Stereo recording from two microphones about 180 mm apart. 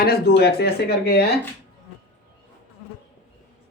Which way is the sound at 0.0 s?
60° left (ahead or behind).